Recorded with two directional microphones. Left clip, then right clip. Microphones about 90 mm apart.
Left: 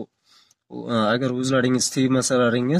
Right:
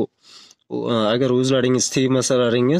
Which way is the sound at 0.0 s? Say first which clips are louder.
Right 13 dB; 45° right (ahead or behind).